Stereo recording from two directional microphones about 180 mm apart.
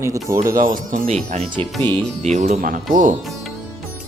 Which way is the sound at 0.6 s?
50° right (ahead or behind).